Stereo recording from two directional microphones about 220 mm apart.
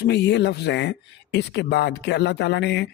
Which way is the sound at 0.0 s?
50° left (ahead or behind).